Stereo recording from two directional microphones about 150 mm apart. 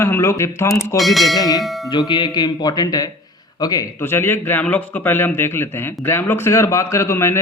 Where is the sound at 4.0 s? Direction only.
15° left (ahead or behind).